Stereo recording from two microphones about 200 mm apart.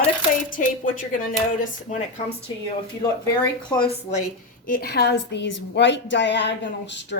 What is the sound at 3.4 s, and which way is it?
Speech, 25° left (ahead or behind).